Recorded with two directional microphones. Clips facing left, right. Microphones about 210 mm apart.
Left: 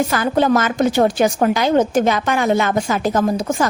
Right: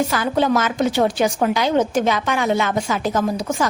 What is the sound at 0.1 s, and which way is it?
A woman's voice, 50° left (ahead or behind).